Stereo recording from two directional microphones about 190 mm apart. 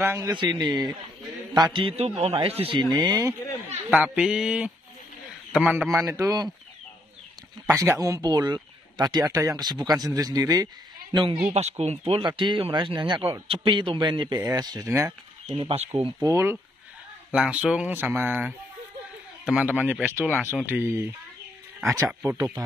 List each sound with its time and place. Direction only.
0.0 s a man's voice: 15° right (ahead or behind)
2.9 s speech: 15° right (ahead or behind)
7.6 s a man's voice: 15° right (ahead or behind); by 16.1 s 30° right (ahead or behind)
16.2 s speech: 15° right (ahead or behind)